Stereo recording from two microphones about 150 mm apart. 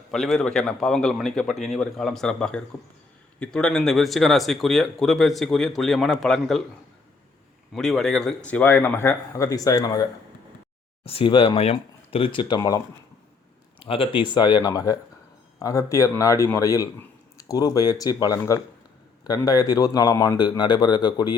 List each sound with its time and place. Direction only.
0.1 s speech: centre (ahead or behind)
7.7 s a man's voice: centre (ahead or behind); by 10.1 s 25° left (ahead or behind)
11.0 s speech: 35° left (ahead or behind)
13.7 s a man's voice: 35° left (ahead or behind)